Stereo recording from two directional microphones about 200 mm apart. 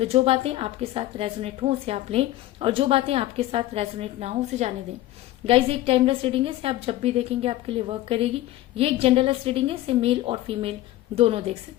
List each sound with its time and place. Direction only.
0.0 s a woman's voice: 30° right (ahead or behind)